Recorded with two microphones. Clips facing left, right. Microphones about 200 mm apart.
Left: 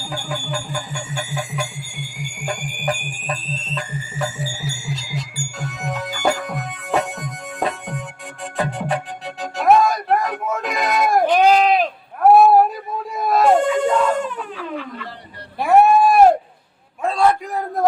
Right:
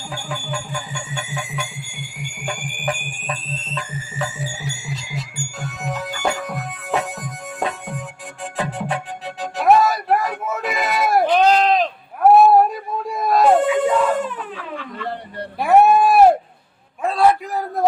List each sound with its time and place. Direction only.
0.0 s music: centre (ahead or behind)
1.6 s speech: centre (ahead or behind)
2.8 s fire alarm: 40° left (ahead or behind)
3.4 s music: centre (ahead or behind)
11.3 s a sound: 10° left (ahead or behind)
13.1 s baby cry: centre (ahead or behind)
15.5 s a sound: centre (ahead or behind)